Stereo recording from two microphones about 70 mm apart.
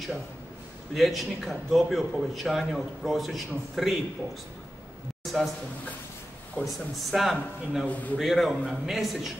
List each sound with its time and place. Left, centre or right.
0.9 s a man's voice: centre
5.2 s a sound: centre
6.6 s a man's voice: centre
7.8 s a man's voice: left
8.2 s a man's voice: centre